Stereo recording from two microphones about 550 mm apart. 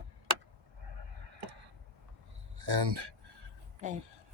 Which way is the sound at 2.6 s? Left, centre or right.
Right.